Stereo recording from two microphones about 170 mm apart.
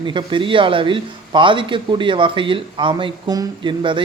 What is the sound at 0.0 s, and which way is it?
Speech, 30° right (ahead or behind).